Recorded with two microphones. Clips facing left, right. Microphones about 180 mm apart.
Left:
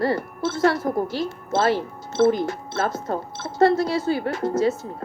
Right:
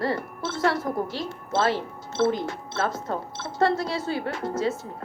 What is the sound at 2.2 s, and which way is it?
Speech, 40° left (ahead or behind).